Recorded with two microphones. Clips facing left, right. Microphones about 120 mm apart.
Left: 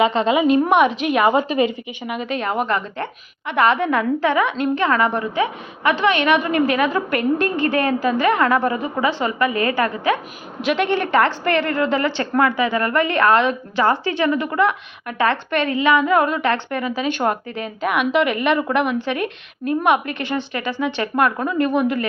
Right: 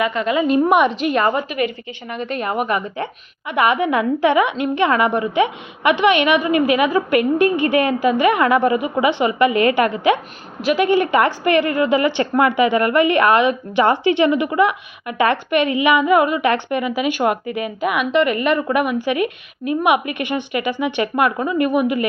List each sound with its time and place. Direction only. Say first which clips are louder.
0.0 s a woman's voice: left 3 dB; 25° left (ahead or behind)
0.4 s a woman's voice: right 2 dB; centre (ahead or behind)
1.3 s a woman's voice: left 3 dB; 25° left (ahead or behind)
2.0 s a woman's voice: even; 5° left (ahead or behind); by 10.2 s 20° right (ahead or behind)
10.6 s a woman's voice: right 3 dB; 5° right (ahead or behind)